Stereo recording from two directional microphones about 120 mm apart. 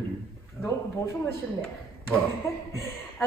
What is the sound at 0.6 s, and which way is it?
A woman's voice, 25° left (ahead or behind).